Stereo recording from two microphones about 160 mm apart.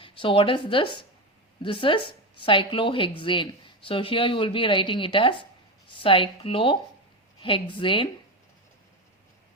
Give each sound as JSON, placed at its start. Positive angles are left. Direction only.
{"t": 0.0, "sound": "speech", "side_deg": 30}